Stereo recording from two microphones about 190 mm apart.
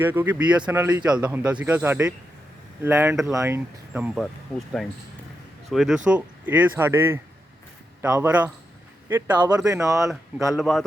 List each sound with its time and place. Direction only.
0.0 s speech: 10° right (ahead or behind)
5.7 s a man's voice: centre (ahead or behind); by 10.1 s 15° right (ahead or behind)
10.5 s a man's voice: centre (ahead or behind)